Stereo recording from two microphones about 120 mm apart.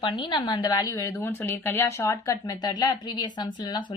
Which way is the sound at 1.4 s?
15° left (ahead or behind).